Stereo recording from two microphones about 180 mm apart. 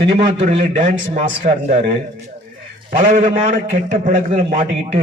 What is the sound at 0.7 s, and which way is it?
A man's voice, 45° right (ahead or behind).